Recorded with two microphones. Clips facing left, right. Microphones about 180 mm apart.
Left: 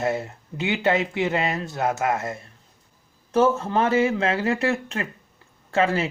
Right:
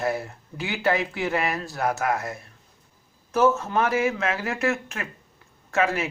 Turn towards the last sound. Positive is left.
turn(degrees=30)  # may be behind; listen again after turning